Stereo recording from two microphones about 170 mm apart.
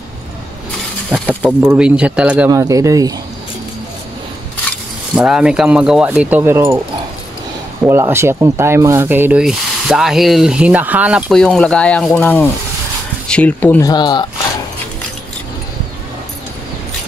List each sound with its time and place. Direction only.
1.1 s speech: 10° right (ahead or behind)
5.1 s speech: 5° right (ahead or behind)
7.8 s speech: 15° right (ahead or behind); by 13.8 s 10° left (ahead or behind)
13.8 s speech: 25° left (ahead or behind)